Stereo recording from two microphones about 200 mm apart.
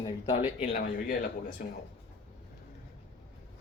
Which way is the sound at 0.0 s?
25° left (ahead or behind).